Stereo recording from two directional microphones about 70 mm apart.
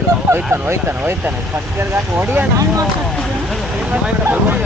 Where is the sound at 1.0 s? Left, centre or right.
Right.